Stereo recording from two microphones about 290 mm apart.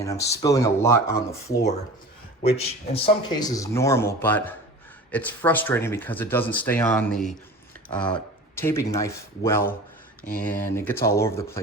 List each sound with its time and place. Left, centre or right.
0.0 s speech: centre
2.4 s speech: centre